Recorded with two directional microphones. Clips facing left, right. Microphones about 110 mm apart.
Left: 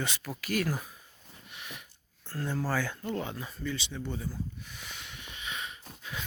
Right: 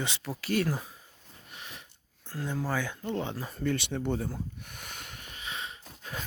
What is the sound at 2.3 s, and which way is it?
Speech, 15° right (ahead or behind).